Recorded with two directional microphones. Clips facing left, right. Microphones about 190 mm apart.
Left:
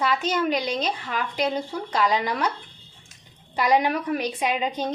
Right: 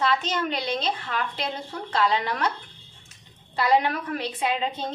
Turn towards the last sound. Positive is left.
turn(degrees=15)  # may be behind; listen again after turning